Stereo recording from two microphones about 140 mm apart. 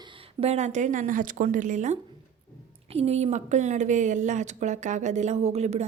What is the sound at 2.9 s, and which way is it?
A woman's voice, 45° right (ahead or behind).